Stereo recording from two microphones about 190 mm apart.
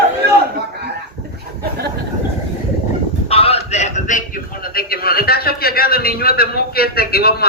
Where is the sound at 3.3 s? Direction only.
30° left (ahead or behind).